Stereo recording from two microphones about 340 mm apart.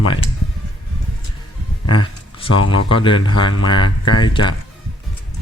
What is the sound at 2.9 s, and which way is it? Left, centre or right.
Speech, centre.